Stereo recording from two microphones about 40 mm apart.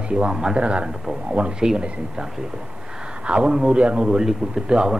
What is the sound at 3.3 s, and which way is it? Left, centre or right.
A man's voice, right.